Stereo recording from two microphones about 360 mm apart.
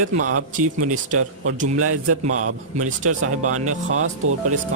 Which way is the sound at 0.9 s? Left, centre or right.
Right.